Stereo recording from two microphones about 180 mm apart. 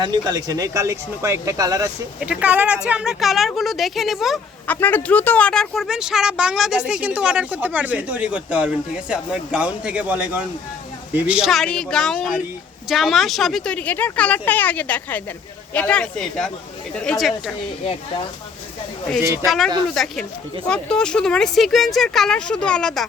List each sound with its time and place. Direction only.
0.0 s speech: 25° right (ahead or behind)
2.2 s a woman's voice: 5° right (ahead or behind)
19.2 s speech: 15° right (ahead or behind)
19.5 s a woman's voice: centre (ahead or behind)